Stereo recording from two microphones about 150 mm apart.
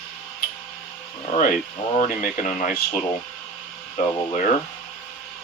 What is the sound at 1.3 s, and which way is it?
Speech, 60° left (ahead or behind).